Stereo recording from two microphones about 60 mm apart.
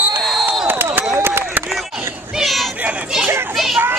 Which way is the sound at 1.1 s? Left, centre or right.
Right.